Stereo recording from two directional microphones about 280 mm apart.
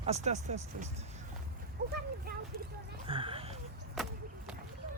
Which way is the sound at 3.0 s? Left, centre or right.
Centre.